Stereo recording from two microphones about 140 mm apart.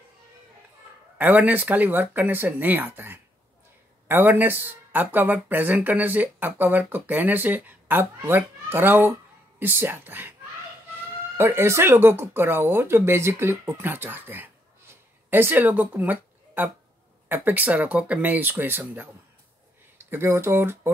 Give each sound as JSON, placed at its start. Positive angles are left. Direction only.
{"t": 1.1, "sound": "speech", "side_deg": -10}
{"t": 11.3, "sound": "speech", "side_deg": -15}
{"t": 20.1, "sound": "speech", "side_deg": -15}